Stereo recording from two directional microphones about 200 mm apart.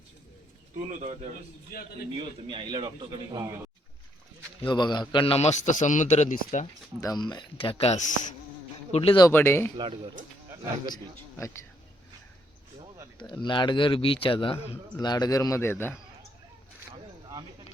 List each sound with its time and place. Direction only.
2.1 s a man's voice: 25° right (ahead or behind)
4.6 s a man's voice: 25° left (ahead or behind)
7.0 s a man's voice: 20° left (ahead or behind); by 8.3 s 40° left (ahead or behind)
8.9 s a man's voice: 30° left (ahead or behind)
9.3 s a man's voice: 10° left (ahead or behind)
9.7 s a man's voice: 25° right (ahead or behind)
10.9 s a man's voice: 15° left (ahead or behind)
13.1 s a man's voice: 20° left (ahead or behind)